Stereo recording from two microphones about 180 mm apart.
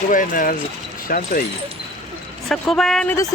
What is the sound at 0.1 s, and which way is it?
Speech, 50° left (ahead or behind).